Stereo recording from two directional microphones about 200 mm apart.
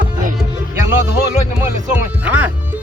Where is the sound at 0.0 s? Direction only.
40° right (ahead or behind).